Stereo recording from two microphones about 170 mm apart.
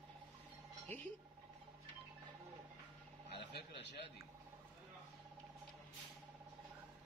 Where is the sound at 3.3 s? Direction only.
85° left.